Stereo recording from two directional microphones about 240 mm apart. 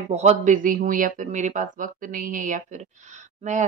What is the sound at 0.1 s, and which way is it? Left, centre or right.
Speech, right.